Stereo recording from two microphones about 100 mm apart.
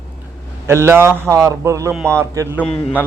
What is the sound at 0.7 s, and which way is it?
Speech, 25° right (ahead or behind).